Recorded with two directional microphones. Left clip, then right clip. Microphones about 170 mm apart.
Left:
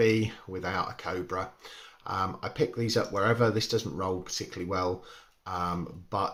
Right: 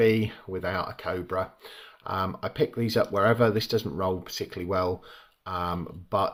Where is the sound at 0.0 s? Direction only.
30° right (ahead or behind).